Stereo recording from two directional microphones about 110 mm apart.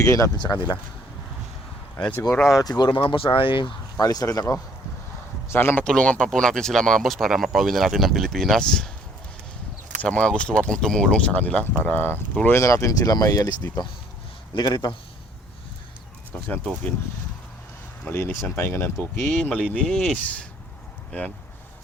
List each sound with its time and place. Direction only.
0.0 s speech: 30° left (ahead or behind)
0.3 s speech: 45° left (ahead or behind)
2.0 s speech: 15° left (ahead or behind)
2.6 s speech: 35° left (ahead or behind)
3.9 s speech: 35° left (ahead or behind)
5.5 s speech: 20° left (ahead or behind)
5.8 s speech: 10° left (ahead or behind)
10.0 s speech: 10° left (ahead or behind); by 14.9 s 40° left (ahead or behind)
16.3 s speech: 10° left (ahead or behind)
18.0 s speech: 20° left (ahead or behind)
19.3 s speech: 10° left (ahead or behind)